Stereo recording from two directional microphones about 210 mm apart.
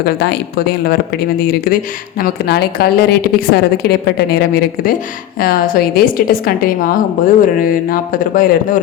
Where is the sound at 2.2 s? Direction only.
50° left (ahead or behind).